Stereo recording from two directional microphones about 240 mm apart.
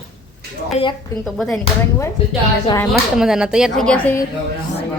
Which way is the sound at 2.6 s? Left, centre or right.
Centre.